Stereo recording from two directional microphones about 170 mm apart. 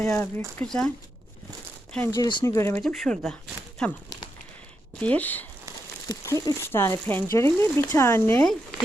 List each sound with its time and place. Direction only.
0.0 s speech: 10° left (ahead or behind)
2.1 s speech: 25° left (ahead or behind)
2.8 s speech: centre (ahead or behind)
6.1 s speech: 20° left (ahead or behind)